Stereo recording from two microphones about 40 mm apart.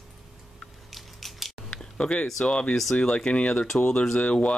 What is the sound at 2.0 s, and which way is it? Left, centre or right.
Speech, left.